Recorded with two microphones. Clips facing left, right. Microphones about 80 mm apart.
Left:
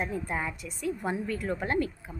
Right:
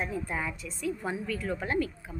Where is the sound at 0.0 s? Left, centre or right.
Left.